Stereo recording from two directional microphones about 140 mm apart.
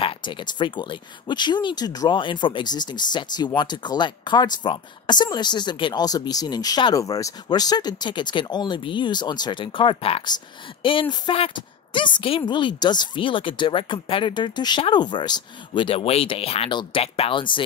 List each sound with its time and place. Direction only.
0.0 s speech: 35° left (ahead or behind)